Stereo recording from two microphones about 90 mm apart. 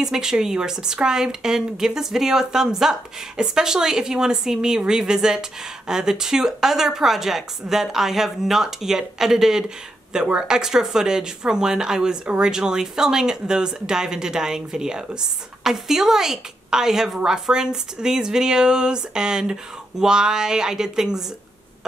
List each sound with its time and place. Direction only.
0.0 s a woman's voice: 5° right (ahead or behind)